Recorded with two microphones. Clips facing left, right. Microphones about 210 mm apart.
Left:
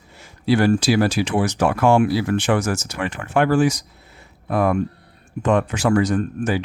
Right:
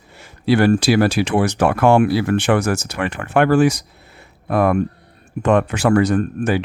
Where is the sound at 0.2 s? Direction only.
65° right (ahead or behind).